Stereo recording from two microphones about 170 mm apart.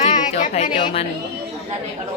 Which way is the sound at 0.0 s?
45° left (ahead or behind).